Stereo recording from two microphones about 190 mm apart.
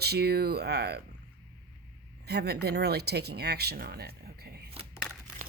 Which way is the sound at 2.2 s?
60° right (ahead or behind).